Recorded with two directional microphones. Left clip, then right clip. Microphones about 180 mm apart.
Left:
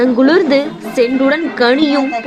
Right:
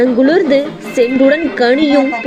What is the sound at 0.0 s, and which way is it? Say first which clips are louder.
Speech: even; 20° right (ahead or behind).